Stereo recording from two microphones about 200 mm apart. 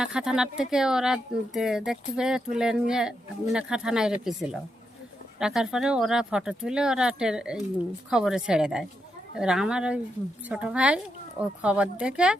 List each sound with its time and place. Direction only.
0.0 s speech: 5° right (ahead or behind)